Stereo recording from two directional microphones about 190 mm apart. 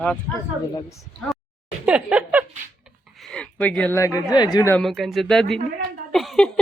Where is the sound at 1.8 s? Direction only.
5° right (ahead or behind).